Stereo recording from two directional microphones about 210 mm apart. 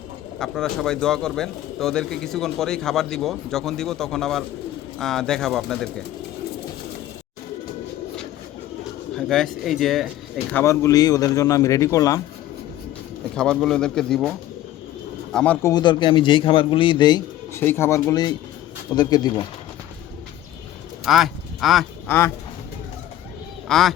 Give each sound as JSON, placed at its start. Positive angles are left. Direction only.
{"t": 0.3, "sound": "speech", "side_deg": 0}
{"t": 9.1, "sound": "speech", "side_deg": 0}
{"t": 10.5, "sound": "speech", "side_deg": 15}
{"t": 13.3, "sound": "speech", "side_deg": 5}
{"t": 15.6, "sound": "speech", "side_deg": 20}
{"t": 21.0, "sound": "speech", "side_deg": 0}
{"t": 23.6, "sound": "speech", "side_deg": 0}